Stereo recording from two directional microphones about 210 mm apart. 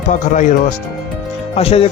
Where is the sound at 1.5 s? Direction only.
25° left (ahead or behind).